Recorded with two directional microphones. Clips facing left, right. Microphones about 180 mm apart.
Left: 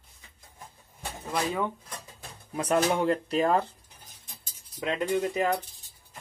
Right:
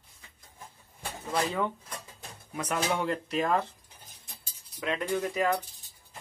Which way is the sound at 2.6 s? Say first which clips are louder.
Left 5 dB; 35° left (ahead or behind).